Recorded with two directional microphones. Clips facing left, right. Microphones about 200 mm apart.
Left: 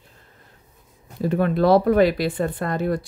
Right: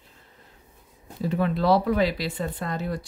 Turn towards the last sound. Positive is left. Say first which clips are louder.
# left 6 dB
turn(degrees=55)  # may be behind; listen again after turning